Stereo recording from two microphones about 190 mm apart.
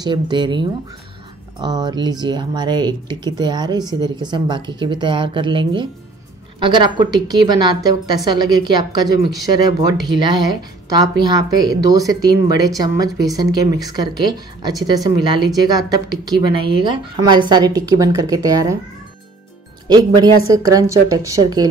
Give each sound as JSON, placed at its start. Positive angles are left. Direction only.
{"t": 0.0, "sound": "speech", "side_deg": -25}
{"t": 19.9, "sound": "speech", "side_deg": -20}